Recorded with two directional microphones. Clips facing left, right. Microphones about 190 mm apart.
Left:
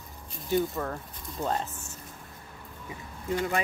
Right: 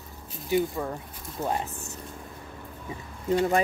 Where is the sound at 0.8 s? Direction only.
10° right (ahead or behind).